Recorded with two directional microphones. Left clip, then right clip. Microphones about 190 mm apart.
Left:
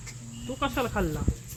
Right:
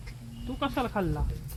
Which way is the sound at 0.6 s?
45° right (ahead or behind).